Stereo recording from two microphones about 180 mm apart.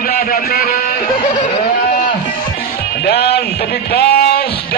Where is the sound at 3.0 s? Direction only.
65° left (ahead or behind).